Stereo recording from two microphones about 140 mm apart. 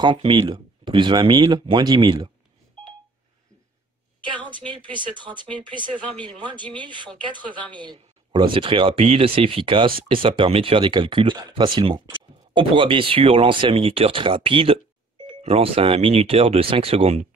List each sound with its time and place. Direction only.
0.0 s speech: 35° right (ahead or behind)
4.2 s a sound: 35° right (ahead or behind)
4.9 s speech: 35° right (ahead or behind)